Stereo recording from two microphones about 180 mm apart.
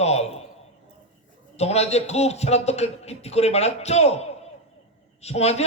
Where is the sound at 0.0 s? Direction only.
35° left (ahead or behind).